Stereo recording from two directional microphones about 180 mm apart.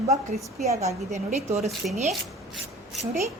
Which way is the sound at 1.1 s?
40° right (ahead or behind).